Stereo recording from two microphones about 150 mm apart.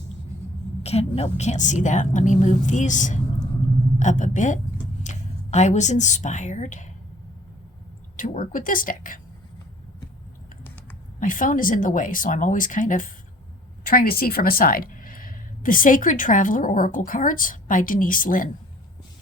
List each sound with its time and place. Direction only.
0.8 s a woman's voice: 45° left (ahead or behind)
8.1 s speech: 60° left (ahead or behind)
11.2 s speech: 60° left (ahead or behind)
13.8 s a woman's voice: 75° left (ahead or behind)